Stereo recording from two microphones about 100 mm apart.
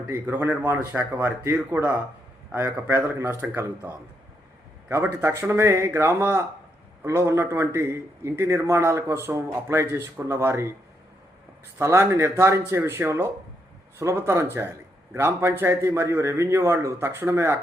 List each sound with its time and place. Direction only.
0.1 s a man's voice: 20° right (ahead or behind)
11.8 s a man's voice: 25° right (ahead or behind)